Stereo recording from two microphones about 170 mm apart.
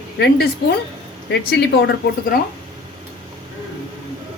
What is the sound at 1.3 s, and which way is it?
A woman's voice, 75° left (ahead or behind).